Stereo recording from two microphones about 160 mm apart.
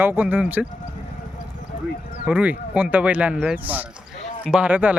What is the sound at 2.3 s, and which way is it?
Speech, 10° right (ahead or behind).